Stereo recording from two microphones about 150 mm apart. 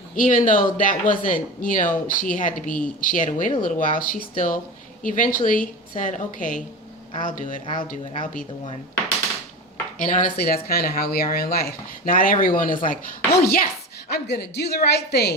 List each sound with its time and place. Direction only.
0.2 s speech: 60° left (ahead or behind)
10.0 s speech: 60° left (ahead or behind)
12.8 s a woman's voice: 75° left (ahead or behind)